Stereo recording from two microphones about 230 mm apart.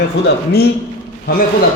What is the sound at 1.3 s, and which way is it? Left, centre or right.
Speech, left.